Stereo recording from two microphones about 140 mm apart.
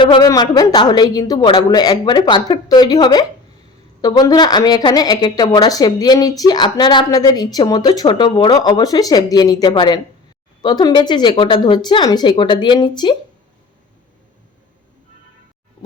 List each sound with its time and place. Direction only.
0.0 s a woman's voice: 35° left (ahead or behind)